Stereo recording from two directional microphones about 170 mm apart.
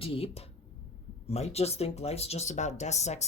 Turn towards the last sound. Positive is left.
turn(degrees=40)  # may be behind; listen again after turning